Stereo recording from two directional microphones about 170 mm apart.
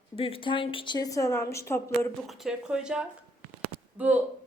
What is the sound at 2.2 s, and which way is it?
A woman's voice, centre (ahead or behind).